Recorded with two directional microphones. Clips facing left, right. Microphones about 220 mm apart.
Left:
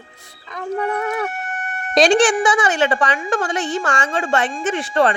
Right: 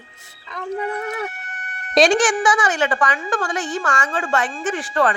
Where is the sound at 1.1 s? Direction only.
50° left (ahead or behind).